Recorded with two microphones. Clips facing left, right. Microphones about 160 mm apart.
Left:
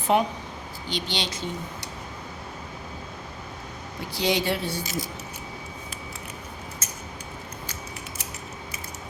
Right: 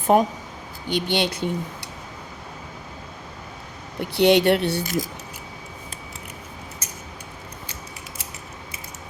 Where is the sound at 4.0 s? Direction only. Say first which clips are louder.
Right 9 dB; 65° right (ahead or behind).